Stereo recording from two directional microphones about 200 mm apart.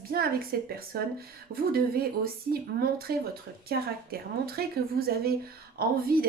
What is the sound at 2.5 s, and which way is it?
A woman's voice, 50° right (ahead or behind).